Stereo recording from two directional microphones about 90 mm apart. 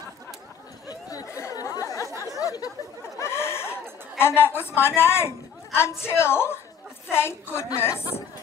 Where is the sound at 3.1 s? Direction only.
30° left (ahead or behind).